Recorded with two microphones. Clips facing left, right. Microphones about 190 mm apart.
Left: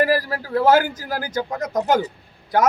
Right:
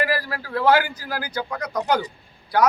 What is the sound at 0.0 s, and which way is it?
A man's voice, 40° left (ahead or behind).